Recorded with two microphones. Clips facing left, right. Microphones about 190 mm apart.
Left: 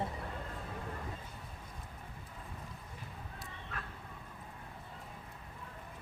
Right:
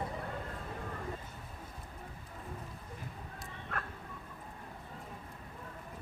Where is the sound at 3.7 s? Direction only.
55° right (ahead or behind).